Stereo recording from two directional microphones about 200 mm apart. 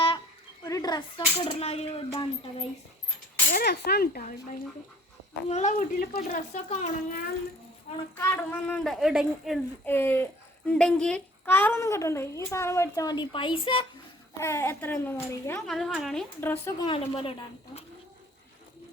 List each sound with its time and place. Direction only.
0.6 s a sound: 20° left (ahead or behind)
1.5 s speech: 30° left (ahead or behind)
3.5 s speech: 50° left (ahead or behind)
8.1 s speech: 10° left (ahead or behind)
9.8 s a child's voice: 10° left (ahead or behind)
14.3 s a child's voice: 15° left (ahead or behind)
16.8 s a woman's voice: 25° left (ahead or behind)